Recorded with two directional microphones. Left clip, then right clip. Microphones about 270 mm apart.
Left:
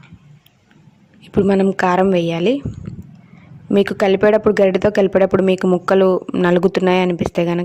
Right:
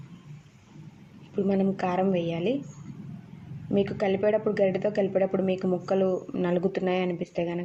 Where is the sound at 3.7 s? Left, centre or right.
Left.